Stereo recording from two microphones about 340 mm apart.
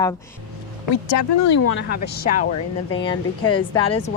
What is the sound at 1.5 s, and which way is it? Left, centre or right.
Speech, left.